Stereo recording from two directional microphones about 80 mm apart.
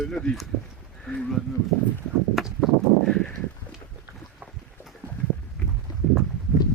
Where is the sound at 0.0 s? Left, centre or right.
Centre.